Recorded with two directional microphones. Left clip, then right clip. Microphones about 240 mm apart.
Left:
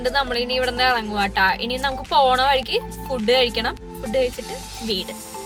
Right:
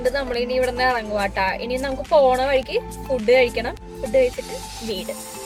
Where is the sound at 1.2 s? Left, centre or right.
Left.